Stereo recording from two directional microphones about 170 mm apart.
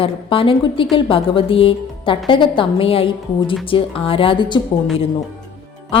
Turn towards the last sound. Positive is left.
turn(degrees=30)  # may be behind; listen again after turning